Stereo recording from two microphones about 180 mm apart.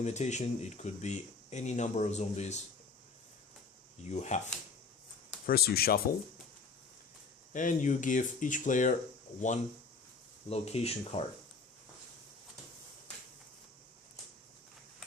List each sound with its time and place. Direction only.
0.0 s speech: 40° left (ahead or behind)
4.0 s speech: 40° left (ahead or behind)
5.5 s speech: 60° left (ahead or behind)
7.5 s speech: 45° left (ahead or behind)
10.5 s speech: 35° left (ahead or behind)